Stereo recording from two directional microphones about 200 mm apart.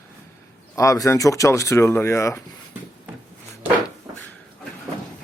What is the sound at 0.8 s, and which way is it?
Speech, 15° left (ahead or behind).